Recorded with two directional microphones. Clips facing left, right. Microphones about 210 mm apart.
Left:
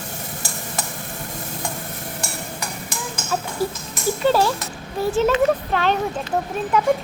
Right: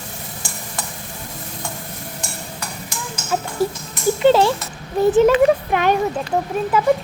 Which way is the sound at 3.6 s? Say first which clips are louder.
Right 6 dB; 25° right (ahead or behind).